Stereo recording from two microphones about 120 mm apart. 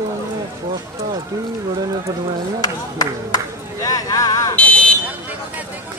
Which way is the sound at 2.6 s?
35° left (ahead or behind).